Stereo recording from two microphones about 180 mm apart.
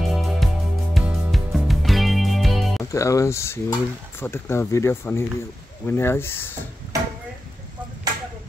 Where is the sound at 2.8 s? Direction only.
15° left (ahead or behind).